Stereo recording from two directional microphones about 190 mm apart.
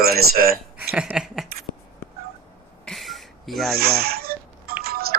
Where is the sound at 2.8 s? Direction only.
Centre (ahead or behind).